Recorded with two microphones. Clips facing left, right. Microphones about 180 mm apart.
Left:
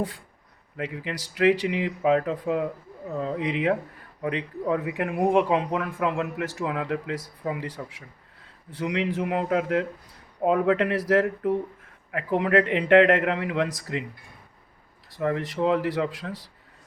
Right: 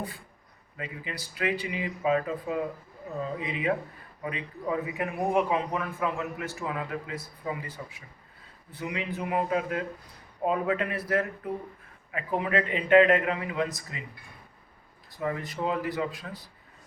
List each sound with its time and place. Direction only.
0.8 s a man's voice: 85° left
12.1 s a man's voice: 75° left (ahead or behind)
15.1 s a man's voice: 75° left (ahead or behind); by 16.5 s 90° left